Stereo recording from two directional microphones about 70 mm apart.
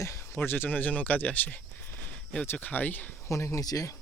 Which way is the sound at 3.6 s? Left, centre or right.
Left.